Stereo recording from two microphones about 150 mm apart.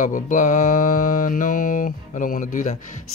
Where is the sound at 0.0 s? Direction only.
60° left (ahead or behind).